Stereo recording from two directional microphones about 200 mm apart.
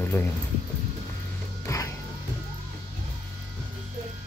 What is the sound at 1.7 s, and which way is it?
Music, 15° left (ahead or behind).